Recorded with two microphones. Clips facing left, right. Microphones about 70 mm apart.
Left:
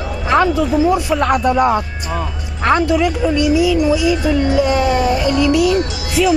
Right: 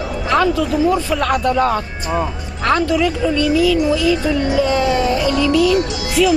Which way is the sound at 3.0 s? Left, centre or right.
Centre.